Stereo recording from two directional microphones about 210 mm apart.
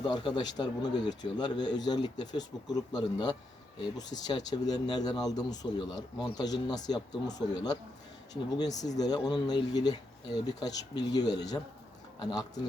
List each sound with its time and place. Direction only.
0.0 s speech: 20° left (ahead or behind)